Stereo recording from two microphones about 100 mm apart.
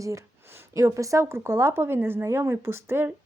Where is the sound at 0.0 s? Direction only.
30° right (ahead or behind).